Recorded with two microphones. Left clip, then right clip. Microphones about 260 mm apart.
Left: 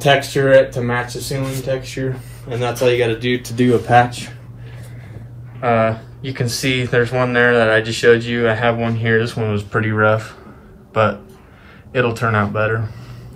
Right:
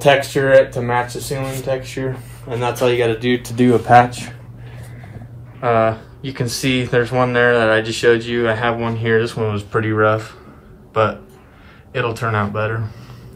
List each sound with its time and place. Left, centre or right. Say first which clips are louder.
0.0 s speech: right 1 dB; right
5.6 s speech: even; centre